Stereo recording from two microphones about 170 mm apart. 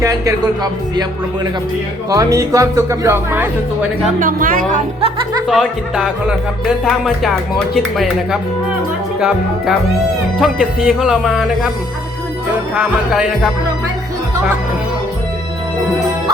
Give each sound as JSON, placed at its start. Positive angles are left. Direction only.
{"t": 0.0, "sound": "speech", "side_deg": -20}
{"t": 2.0, "sound": "speech", "side_deg": -20}
{"t": 4.0, "sound": "speech", "side_deg": -55}
{"t": 5.5, "sound": "speech", "side_deg": 0}
{"t": 10.4, "sound": "speech", "side_deg": -5}
{"t": 12.7, "sound": "speech", "side_deg": -5}